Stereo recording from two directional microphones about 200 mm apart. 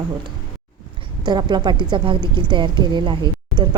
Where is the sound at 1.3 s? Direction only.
20° right (ahead or behind).